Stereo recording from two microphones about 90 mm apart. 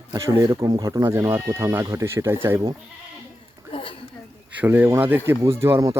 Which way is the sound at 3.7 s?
85° left.